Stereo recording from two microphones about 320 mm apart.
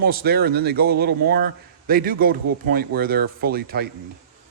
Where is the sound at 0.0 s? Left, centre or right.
Right.